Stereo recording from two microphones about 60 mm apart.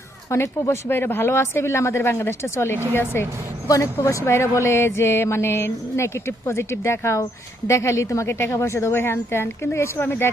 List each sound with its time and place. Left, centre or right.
0.3 s a woman's voice: left
0.9 s a woman's voice: left
4.0 s a woman's voice: left